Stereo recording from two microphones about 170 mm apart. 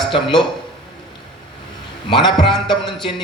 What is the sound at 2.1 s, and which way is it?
Speech, 25° left (ahead or behind).